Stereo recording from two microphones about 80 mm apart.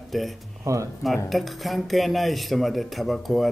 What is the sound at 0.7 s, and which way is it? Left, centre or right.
Speech, right.